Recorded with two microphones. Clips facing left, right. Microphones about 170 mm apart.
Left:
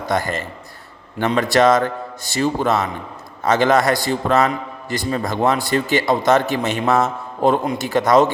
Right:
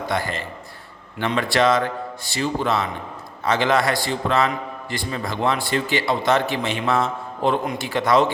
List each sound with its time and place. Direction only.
0.1 s a man's voice: 45° left (ahead or behind)